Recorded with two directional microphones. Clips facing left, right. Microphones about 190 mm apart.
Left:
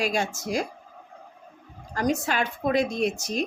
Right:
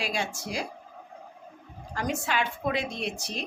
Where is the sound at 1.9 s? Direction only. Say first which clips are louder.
Left 4 dB; 40° left (ahead or behind).